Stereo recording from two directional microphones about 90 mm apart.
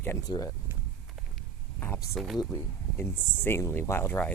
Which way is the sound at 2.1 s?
5° right (ahead or behind).